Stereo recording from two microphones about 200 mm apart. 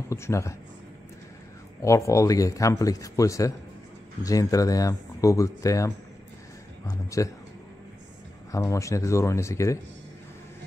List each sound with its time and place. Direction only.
0.1 s a man's voice: 15° left (ahead or behind)
1.8 s a man's voice: 15° left (ahead or behind)
8.5 s a man's voice: 15° left (ahead or behind)